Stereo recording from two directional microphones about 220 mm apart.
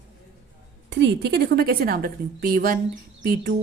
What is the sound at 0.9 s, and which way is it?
A woman's voice, 50° right (ahead or behind).